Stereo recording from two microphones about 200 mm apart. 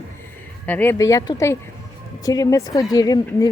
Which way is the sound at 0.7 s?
10° left (ahead or behind).